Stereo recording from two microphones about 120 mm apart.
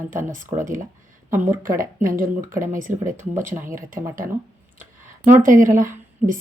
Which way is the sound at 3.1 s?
20° right (ahead or behind).